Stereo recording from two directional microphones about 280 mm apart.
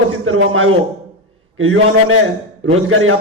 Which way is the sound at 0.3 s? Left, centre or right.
Right.